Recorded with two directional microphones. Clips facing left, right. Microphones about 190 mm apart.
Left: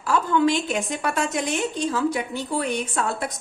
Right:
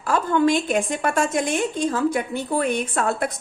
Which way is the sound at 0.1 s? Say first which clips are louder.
Right 1 dB; 50° right (ahead or behind).